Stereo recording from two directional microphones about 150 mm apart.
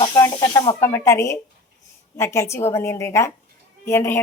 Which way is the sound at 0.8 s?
15° left (ahead or behind).